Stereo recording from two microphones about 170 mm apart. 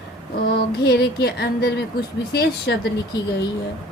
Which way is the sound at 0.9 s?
70° left (ahead or behind).